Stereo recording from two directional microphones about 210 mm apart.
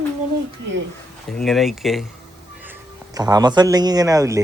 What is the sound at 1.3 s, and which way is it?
Speech, centre (ahead or behind).